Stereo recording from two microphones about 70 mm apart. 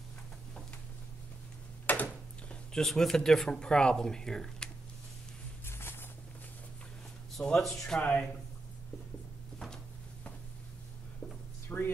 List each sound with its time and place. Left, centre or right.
1.9 s a sound: left
2.7 s speech: centre
5.7 s walk: left
7.4 s speech: centre
8.0 s speech: left
11.7 s a sound: left